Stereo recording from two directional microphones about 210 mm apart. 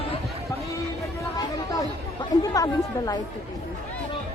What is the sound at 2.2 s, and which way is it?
Speech, 15° left (ahead or behind).